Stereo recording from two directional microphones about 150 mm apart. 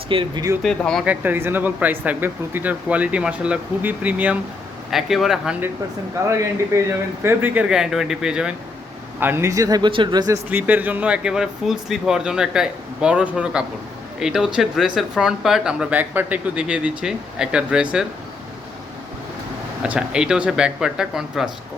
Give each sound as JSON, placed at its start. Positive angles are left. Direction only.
{"t": 0.1, "sound": "speech", "side_deg": -35}
{"t": 0.6, "sound": "speech", "side_deg": 5}
{"t": 1.0, "sound": "speech", "side_deg": -10}
{"t": 6.7, "sound": "speech", "side_deg": -15}
{"t": 9.2, "sound": "speech", "side_deg": -15}
{"t": 10.5, "sound": "speech", "side_deg": -10}
{"t": 19.8, "sound": "speech", "side_deg": -5}